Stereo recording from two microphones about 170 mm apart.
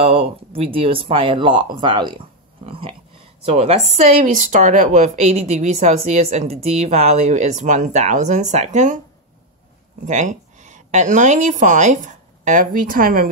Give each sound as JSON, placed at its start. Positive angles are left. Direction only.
{"t": 0.0, "sound": "speech", "side_deg": -35}
{"t": 10.0, "sound": "speech", "side_deg": -45}